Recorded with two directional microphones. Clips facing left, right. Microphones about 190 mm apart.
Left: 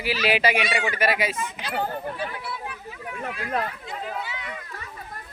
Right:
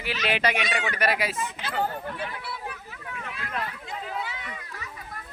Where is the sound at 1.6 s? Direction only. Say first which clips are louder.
Even; 15° left (ahead or behind).